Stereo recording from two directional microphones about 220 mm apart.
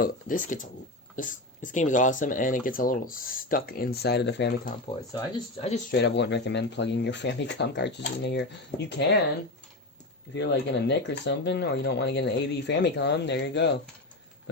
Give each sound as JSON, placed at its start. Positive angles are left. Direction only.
{"t": 0.0, "sound": "speech", "side_deg": 40}
{"t": 5.5, "sound": "speech", "side_deg": 30}
{"t": 5.9, "sound": "speech", "side_deg": 50}
{"t": 10.3, "sound": "speech", "side_deg": 50}